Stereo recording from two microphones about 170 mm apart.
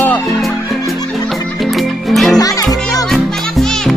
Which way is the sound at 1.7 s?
Centre (ahead or behind).